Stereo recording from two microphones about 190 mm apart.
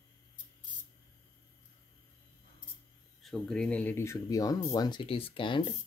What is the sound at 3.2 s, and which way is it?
Speech, centre (ahead or behind).